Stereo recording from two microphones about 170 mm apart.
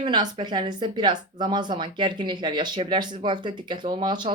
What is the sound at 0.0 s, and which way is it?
Speech, 30° right (ahead or behind).